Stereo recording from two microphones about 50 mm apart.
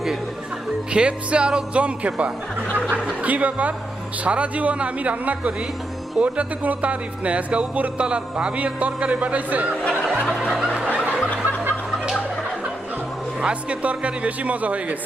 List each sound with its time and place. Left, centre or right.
0.9 s speech: right
11.1 s music: left
13.4 s speech: right